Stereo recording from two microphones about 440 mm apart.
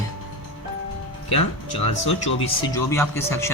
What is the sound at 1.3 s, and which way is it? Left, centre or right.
Speech, left.